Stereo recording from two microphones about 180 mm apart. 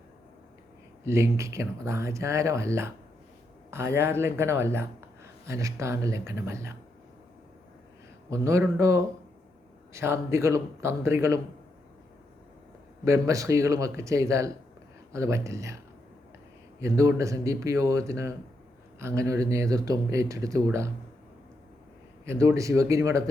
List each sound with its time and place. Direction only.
1.0 s speech: 15° right (ahead or behind)
3.9 s speech: 15° right (ahead or behind)
8.3 s speech: 15° right (ahead or behind)
13.1 s speech: 15° right (ahead or behind)
16.8 s speech: 15° right (ahead or behind)
22.3 s speech: 15° right (ahead or behind)